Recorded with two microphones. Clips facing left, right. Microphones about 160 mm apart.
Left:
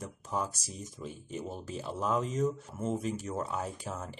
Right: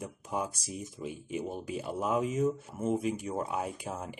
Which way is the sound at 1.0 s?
10° right (ahead or behind).